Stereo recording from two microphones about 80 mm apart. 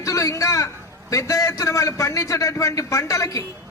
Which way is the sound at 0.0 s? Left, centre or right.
Left.